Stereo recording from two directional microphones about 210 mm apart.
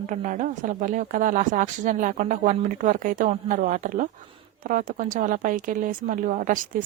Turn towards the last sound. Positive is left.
turn(degrees=-40)  # may be behind; listen again after turning